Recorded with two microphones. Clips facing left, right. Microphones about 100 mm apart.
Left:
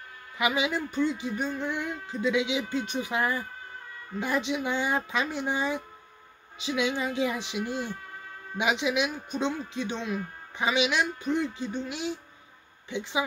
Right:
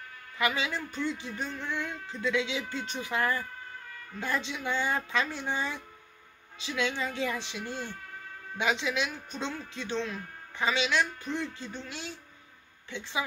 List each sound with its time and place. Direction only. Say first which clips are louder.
0.4 s a man's voice: left 3 dB; 15° left (ahead or behind)